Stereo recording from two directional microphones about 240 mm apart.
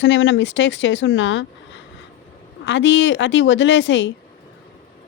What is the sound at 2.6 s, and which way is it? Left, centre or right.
Speech, left.